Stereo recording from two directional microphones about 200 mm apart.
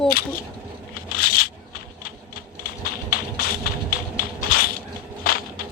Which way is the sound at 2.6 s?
50° left (ahead or behind).